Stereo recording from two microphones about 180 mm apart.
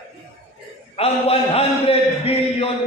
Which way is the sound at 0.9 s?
35° left (ahead or behind).